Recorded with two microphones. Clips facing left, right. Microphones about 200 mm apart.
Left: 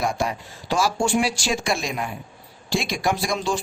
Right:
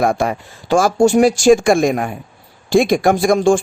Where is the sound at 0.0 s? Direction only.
55° right (ahead or behind).